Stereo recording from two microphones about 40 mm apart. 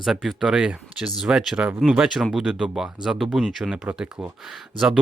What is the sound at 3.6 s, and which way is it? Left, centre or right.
Speech, right.